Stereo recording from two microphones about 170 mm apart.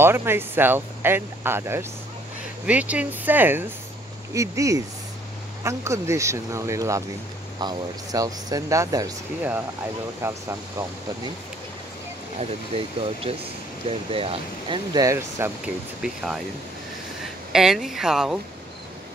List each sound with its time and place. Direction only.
0.0 s speech: 15° right (ahead or behind)
10.2 s speech: 15° right (ahead or behind)
12.4 s speech: 35° right (ahead or behind)
15.0 s speech: 20° right (ahead or behind)
16.0 s speech: centre (ahead or behind)
17.5 s speech: 5° right (ahead or behind)